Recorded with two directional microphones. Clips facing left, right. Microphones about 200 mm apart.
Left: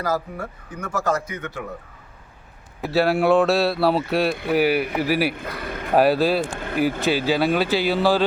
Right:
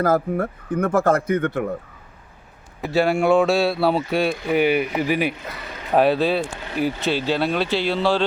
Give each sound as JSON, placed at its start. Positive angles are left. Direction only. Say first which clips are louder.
{"t": 0.0, "sound": "speech", "louder": "right 6 dB", "side_deg": -55}
{"t": 2.8, "sound": "speech", "louder": "even", "side_deg": 0}
{"t": 5.5, "sound": "a sound", "louder": "left 5 dB", "side_deg": 55}
{"t": 5.9, "sound": "speech", "louder": "even", "side_deg": 5}